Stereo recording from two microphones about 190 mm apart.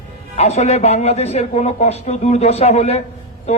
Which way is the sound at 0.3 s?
35° left (ahead or behind).